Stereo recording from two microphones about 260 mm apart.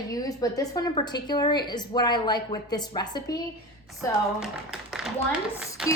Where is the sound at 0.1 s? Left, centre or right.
Centre.